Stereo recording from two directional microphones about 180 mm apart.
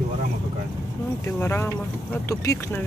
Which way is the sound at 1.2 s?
15° left (ahead or behind).